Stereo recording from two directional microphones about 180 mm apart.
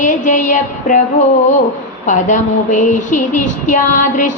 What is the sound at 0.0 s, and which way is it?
Music, 45° left (ahead or behind).